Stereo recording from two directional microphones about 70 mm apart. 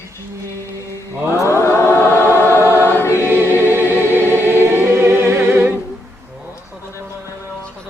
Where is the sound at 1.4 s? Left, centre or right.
Left.